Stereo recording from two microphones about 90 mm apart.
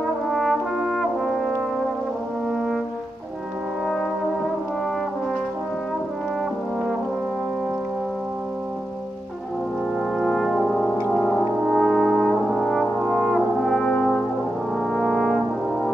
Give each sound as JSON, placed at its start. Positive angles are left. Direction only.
{"t": 0.3, "sound": "brass instrument", "side_deg": 0}
{"t": 10.1, "sound": "brass instrument", "side_deg": 5}
{"t": 11.1, "sound": "music", "side_deg": 5}
{"t": 11.6, "sound": "brass instrument", "side_deg": 5}